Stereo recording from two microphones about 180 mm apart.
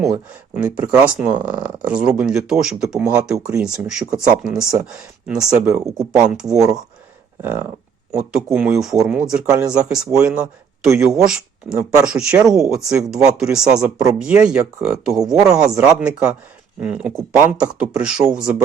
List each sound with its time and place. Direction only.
0.0 s speech: 5° right (ahead or behind)
13.8 s speech: 20° right (ahead or behind)
14.2 s speech: 5° right (ahead or behind)